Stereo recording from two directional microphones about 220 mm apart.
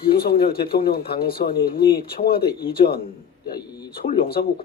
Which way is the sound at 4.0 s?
45° left (ahead or behind).